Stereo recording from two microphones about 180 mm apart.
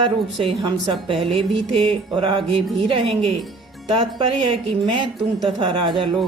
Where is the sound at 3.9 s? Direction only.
30° right (ahead or behind).